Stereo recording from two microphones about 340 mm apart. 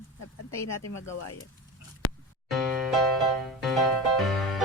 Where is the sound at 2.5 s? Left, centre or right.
Centre.